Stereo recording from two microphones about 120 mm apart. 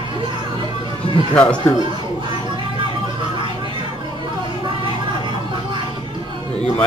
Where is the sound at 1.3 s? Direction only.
10° left (ahead or behind).